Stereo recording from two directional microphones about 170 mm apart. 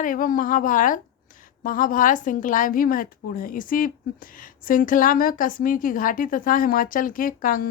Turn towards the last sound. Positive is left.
turn(degrees=55)  # may be behind; listen again after turning